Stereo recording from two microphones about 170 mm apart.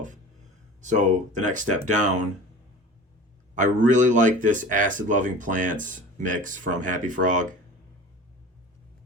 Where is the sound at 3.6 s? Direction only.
45° right (ahead or behind).